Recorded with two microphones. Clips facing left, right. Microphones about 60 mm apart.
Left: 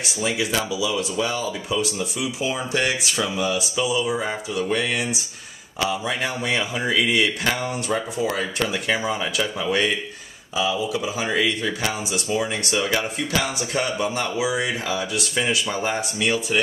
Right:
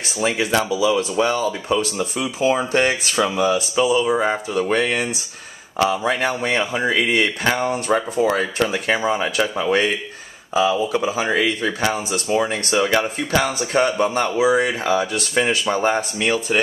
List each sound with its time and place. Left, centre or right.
0.2 s speech: right
8.5 s speech: right
10.5 s speech: right
11.2 s speech: right